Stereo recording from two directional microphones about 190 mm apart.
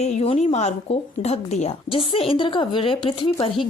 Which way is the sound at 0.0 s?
35° left (ahead or behind).